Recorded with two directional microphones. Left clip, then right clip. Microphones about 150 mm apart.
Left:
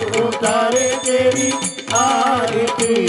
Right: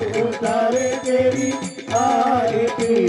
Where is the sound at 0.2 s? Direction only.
35° left (ahead or behind).